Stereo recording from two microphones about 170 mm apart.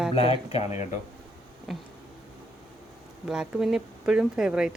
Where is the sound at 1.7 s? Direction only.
Centre (ahead or behind).